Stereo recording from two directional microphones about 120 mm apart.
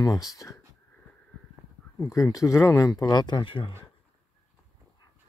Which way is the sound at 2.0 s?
25° left (ahead or behind).